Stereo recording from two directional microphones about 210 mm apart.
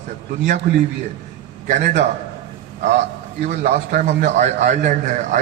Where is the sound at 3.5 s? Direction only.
40° right (ahead or behind).